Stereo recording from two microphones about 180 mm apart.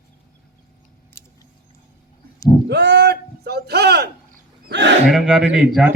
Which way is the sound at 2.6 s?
70° right (ahead or behind).